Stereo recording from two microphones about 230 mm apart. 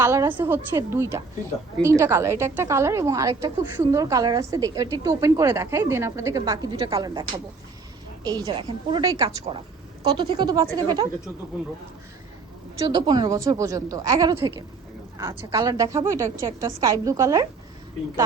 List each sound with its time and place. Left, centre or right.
0.0 s a woman's voice: centre
12.8 s a woman's voice: centre